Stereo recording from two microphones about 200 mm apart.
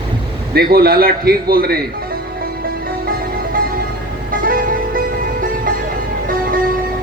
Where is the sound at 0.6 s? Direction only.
50° right (ahead or behind).